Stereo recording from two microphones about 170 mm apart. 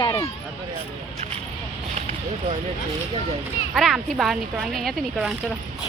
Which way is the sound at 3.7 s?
Centre (ahead or behind).